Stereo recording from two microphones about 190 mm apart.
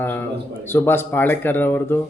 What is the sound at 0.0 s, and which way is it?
Speech, 10° left (ahead or behind).